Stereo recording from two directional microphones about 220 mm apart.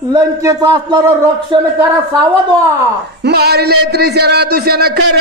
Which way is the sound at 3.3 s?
50° right (ahead or behind).